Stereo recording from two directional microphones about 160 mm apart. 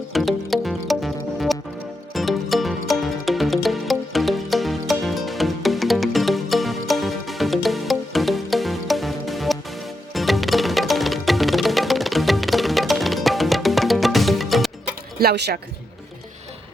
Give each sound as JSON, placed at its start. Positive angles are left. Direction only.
{"t": 0.1, "sound": "music", "side_deg": 0}
{"t": 15.2, "sound": "speech", "side_deg": -80}